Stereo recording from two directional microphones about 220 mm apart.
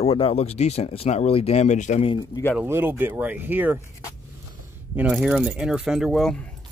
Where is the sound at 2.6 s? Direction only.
10° right (ahead or behind).